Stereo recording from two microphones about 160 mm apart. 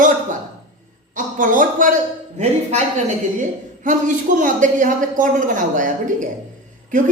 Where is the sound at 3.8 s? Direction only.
55° right (ahead or behind).